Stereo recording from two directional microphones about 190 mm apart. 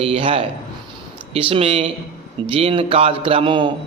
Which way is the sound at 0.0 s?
30° right (ahead or behind).